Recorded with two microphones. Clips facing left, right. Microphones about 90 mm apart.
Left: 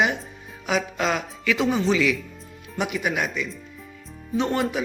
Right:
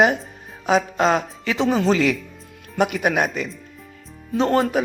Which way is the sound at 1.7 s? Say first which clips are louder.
Right 3 dB; 45° right (ahead or behind).